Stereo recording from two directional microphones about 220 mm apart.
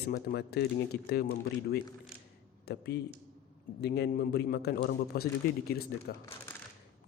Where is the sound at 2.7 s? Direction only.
45° left (ahead or behind).